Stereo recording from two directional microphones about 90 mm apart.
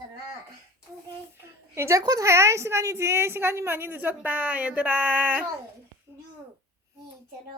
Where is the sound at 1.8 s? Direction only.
35° right (ahead or behind); by 5.4 s 15° right (ahead or behind).